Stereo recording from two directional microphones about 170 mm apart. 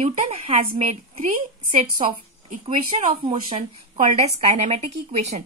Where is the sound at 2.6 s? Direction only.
30° right (ahead or behind).